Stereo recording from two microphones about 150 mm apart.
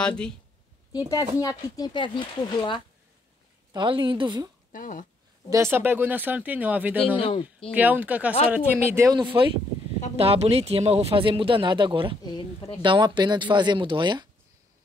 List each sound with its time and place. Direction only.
0.0 s speech: 5° left (ahead or behind)
1.4 s speech: 25° left (ahead or behind)
3.7 s speech: 30° right (ahead or behind)
4.7 s speech: 60° left (ahead or behind)
5.5 s speech: 15° right (ahead or behind)
7.2 s speech: 35° left (ahead or behind)
7.7 s speech: 10° right (ahead or behind)
9.1 s speech: 30° right (ahead or behind)
12.4 s speech: 40° left (ahead or behind)
12.8 s speech: 30° right (ahead or behind)